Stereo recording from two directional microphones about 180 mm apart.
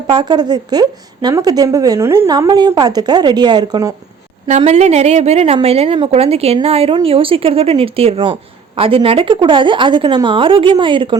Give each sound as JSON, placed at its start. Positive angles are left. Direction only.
{"t": 0.1, "sound": "a woman's voice", "side_deg": -25}
{"t": 4.4, "sound": "a woman's voice", "side_deg": -40}